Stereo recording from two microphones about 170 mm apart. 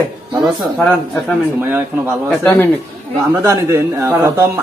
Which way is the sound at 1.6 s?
10° right (ahead or behind).